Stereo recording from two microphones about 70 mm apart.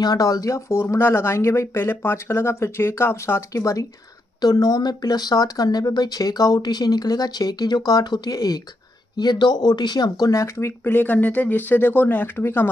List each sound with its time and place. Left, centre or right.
0.0 s speech: left
0.7 s speech: left
3.5 s speech: left
4.4 s speech: left
9.1 s speech: left
10.4 s speech: left